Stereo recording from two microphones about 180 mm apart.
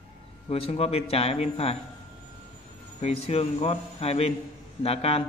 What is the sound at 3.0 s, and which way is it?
A man's voice, 35° left (ahead or behind).